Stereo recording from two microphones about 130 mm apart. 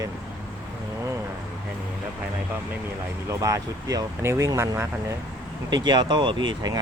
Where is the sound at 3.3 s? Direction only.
25° right (ahead or behind).